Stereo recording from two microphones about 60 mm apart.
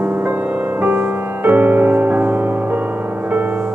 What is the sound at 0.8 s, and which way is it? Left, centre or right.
Music, right.